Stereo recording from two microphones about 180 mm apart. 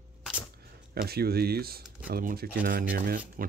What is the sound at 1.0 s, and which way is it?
Speech, 60° right (ahead or behind).